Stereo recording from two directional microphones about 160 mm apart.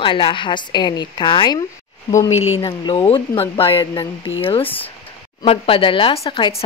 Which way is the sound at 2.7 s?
30° left (ahead or behind).